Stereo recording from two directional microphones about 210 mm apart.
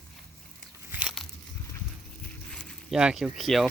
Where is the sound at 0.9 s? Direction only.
5° right (ahead or behind).